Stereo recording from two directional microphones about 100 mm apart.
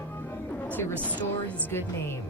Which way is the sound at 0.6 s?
20° left (ahead or behind).